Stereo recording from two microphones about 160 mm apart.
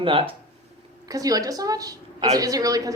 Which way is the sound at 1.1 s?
20° right (ahead or behind).